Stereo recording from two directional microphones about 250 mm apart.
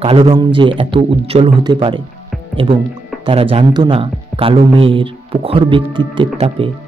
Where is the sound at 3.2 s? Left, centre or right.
Right.